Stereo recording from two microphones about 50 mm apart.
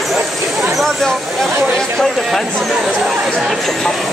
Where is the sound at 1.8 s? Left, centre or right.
Centre.